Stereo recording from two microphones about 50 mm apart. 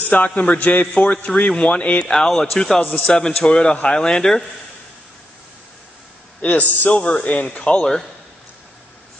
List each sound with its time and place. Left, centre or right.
0.0 s a man's voice: left
1.5 s a man's voice: centre
2.0 s a man's voice: centre
6.4 s a man's voice: left